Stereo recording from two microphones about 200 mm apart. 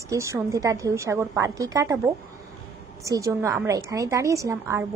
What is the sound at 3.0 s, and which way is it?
A woman's voice, 15° right (ahead or behind).